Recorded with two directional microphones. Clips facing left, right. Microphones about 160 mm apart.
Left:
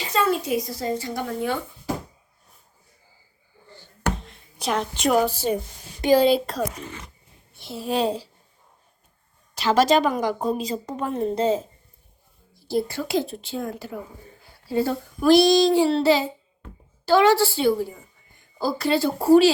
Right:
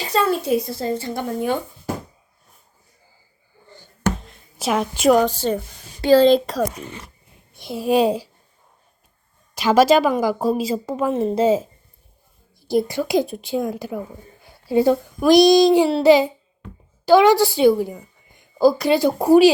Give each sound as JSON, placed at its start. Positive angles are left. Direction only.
{"t": 0.1, "sound": "a woman's voice", "side_deg": -30}
{"t": 3.7, "sound": "a sound", "side_deg": -20}
{"t": 4.2, "sound": "a sound", "side_deg": 0}
{"t": 5.2, "sound": "speech", "side_deg": 10}
{"t": 7.5, "sound": "a child's voice", "side_deg": -15}
{"t": 9.6, "sound": "a woman's voice", "side_deg": -10}